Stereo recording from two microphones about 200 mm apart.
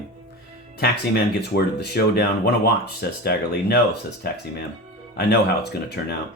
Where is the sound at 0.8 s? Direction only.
55° left (ahead or behind).